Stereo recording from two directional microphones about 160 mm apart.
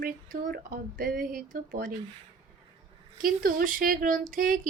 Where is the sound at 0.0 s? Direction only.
55° right (ahead or behind).